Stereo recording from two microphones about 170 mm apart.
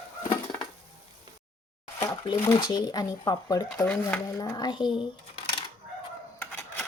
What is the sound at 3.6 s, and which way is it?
Speech, 5° left (ahead or behind).